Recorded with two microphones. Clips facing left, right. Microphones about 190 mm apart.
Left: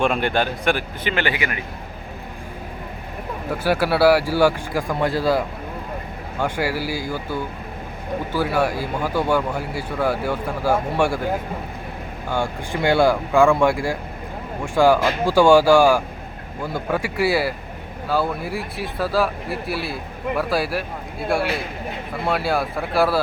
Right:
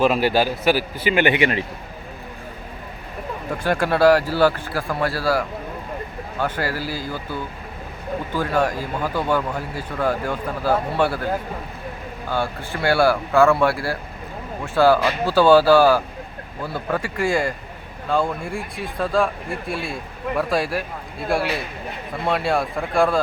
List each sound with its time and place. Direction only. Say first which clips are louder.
0.0 s a man's voice: right 2 dB; 5° right (ahead or behind)
1.2 s a man's voice: right 8 dB; 25° right (ahead or behind)
3.5 s speech: left 1 dB; 5° left (ahead or behind)
12.3 s speech: left 1 dB; 15° left (ahead or behind)